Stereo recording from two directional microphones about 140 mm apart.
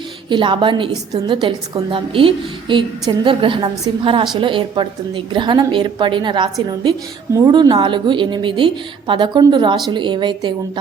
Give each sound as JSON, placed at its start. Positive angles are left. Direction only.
{"t": 0.3, "sound": "a woman's voice", "side_deg": -35}